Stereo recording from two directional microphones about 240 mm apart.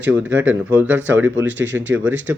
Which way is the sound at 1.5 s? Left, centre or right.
Right.